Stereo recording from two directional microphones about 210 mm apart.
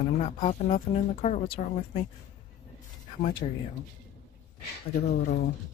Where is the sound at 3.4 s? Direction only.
30° left (ahead or behind).